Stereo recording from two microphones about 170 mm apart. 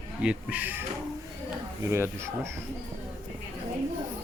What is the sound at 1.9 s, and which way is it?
Speech, 15° right (ahead or behind).